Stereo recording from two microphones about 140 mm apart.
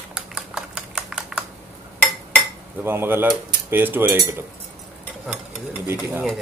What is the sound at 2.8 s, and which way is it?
Stir, 15° right (ahead or behind).